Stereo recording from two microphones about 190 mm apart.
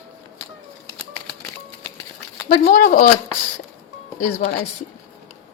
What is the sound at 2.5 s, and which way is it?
Speech, 45° left (ahead or behind).